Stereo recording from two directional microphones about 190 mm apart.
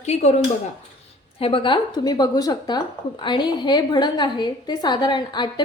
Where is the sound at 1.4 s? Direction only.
30° left (ahead or behind).